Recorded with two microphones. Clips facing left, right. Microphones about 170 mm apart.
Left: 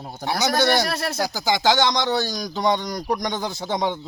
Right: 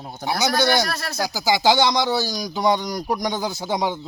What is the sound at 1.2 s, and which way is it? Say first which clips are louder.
Speech: right 3 dB; 5° right (ahead or behind).